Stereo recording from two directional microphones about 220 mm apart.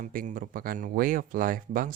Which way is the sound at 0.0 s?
35° right (ahead or behind).